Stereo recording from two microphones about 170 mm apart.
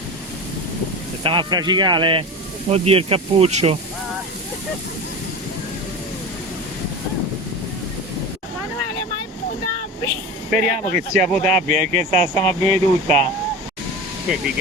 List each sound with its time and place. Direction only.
1.2 s speech: 30° right (ahead or behind)
10.5 s speech: 55° right (ahead or behind)
11.2 s speech: 5° left (ahead or behind)
11.4 s speech: 50° right (ahead or behind)
12.3 s speech: 5° left (ahead or behind)
12.6 s speech: 40° right (ahead or behind)